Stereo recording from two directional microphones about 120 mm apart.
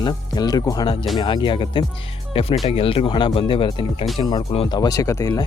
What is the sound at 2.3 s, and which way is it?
Speech, 50° left (ahead or behind).